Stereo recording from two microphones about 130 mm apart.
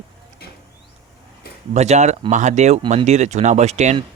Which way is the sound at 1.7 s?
65° right (ahead or behind).